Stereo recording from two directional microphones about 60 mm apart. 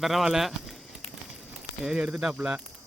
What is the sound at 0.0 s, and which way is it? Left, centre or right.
Speech, centre.